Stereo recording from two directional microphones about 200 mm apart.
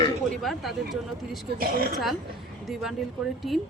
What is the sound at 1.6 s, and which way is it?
Speech, 50° right (ahead or behind).